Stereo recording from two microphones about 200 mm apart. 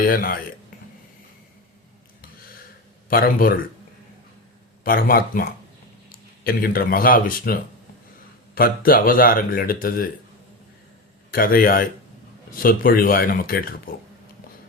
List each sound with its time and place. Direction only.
0.0 s speech: 45° left (ahead or behind)
3.1 s speech: 45° left (ahead or behind)
4.8 s speech: 45° left (ahead or behind)
11.3 s speech: 45° left (ahead or behind)